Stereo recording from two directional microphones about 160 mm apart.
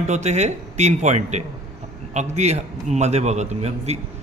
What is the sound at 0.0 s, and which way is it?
A man's voice, 45° right (ahead or behind).